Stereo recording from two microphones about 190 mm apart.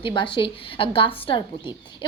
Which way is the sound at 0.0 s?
25° left (ahead or behind).